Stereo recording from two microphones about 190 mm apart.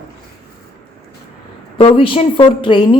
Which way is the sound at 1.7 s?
30° left (ahead or behind).